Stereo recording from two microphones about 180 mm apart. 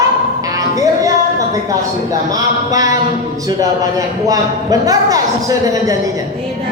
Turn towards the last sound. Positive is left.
turn(degrees=-20)  # may be behind; listen again after turning